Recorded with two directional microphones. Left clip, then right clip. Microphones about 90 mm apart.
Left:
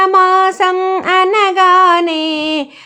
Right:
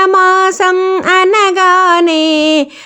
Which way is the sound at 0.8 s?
20° right (ahead or behind).